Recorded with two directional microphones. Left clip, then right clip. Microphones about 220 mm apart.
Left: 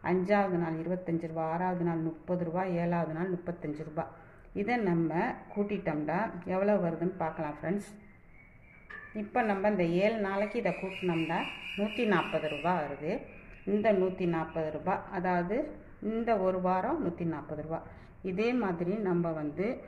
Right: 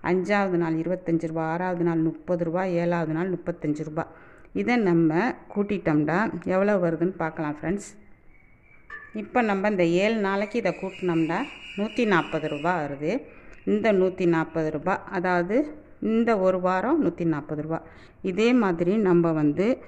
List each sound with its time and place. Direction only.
0.0 s speech: 40° right (ahead or behind)
9.1 s speech: 40° right (ahead or behind)